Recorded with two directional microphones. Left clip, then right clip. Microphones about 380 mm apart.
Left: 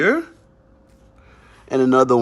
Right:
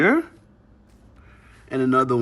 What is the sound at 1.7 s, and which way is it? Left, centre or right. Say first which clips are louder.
Speech: left 5 dB; centre.